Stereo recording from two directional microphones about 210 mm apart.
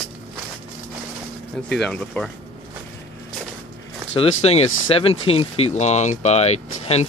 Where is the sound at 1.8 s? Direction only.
5° left (ahead or behind).